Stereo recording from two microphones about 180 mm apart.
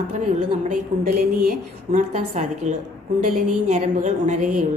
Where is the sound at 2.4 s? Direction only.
40° right (ahead or behind).